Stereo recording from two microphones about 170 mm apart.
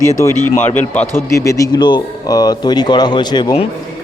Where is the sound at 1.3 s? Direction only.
20° left (ahead or behind).